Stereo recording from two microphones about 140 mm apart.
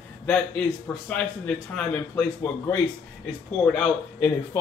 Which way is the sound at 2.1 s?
20° left (ahead or behind).